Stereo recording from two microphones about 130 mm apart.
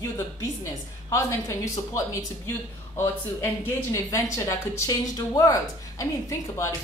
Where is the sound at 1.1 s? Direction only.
25° left (ahead or behind).